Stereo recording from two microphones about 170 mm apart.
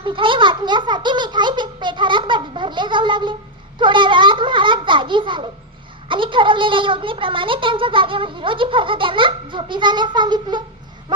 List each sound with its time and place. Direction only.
0.0 s a child's voice: 30° right (ahead or behind)
3.8 s a sound: 30° right (ahead or behind)
6.1 s a woman's voice: 30° right (ahead or behind)